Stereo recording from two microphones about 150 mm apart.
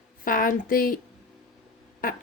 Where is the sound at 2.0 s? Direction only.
70° left (ahead or behind).